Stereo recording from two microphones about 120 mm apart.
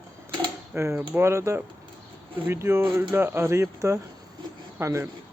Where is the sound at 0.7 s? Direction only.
20° right (ahead or behind).